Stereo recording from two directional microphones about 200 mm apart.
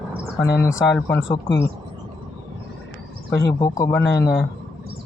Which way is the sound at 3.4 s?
15° left (ahead or behind).